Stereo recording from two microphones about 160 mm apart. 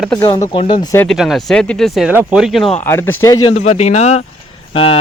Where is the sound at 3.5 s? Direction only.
45° left (ahead or behind).